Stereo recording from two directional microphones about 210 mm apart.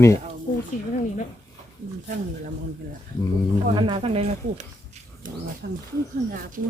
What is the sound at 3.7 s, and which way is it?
Speech, 25° right (ahead or behind).